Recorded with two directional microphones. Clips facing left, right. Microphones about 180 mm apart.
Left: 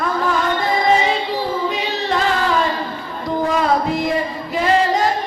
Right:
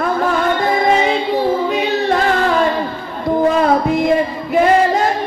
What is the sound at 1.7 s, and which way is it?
Carnatic music, 55° right (ahead or behind).